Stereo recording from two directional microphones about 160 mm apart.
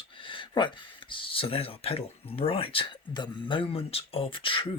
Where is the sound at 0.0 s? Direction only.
30° left (ahead or behind).